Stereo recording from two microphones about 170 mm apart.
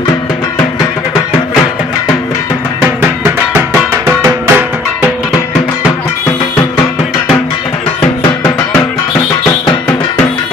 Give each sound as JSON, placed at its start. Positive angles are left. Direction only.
{"t": 3.0, "sound": "music", "side_deg": -5}
{"t": 8.0, "sound": "music", "side_deg": 15}